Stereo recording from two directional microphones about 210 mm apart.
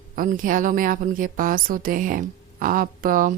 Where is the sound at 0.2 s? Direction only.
40° right (ahead or behind).